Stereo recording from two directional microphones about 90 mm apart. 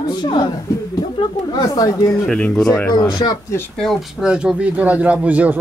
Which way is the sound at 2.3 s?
5° left (ahead or behind).